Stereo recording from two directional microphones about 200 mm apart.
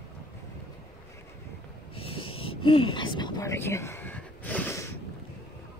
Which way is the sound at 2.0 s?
25° left (ahead or behind).